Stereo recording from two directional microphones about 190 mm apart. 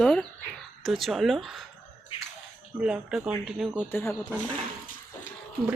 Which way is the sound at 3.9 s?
10° left (ahead or behind).